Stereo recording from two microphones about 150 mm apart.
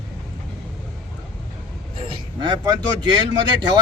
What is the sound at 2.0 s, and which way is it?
Speech, 35° right (ahead or behind).